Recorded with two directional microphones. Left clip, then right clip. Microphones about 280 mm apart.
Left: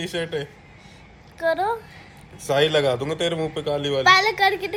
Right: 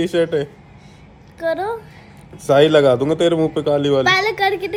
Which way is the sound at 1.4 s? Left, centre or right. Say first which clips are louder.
Right 1 dB; centre.